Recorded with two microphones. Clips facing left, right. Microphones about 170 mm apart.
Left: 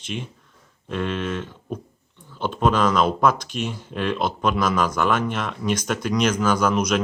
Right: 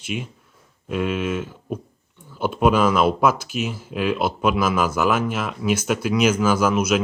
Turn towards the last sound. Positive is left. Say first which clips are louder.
# right 1 dB
turn(degrees=-5)  # may be behind; listen again after turning